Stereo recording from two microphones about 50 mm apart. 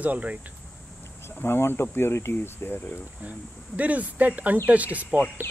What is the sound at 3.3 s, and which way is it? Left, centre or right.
Speech, right.